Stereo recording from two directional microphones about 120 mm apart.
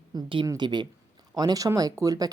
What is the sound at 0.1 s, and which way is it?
Speech, 40° right (ahead or behind).